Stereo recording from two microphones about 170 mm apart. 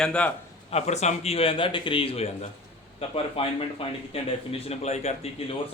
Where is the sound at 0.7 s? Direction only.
40° left (ahead or behind).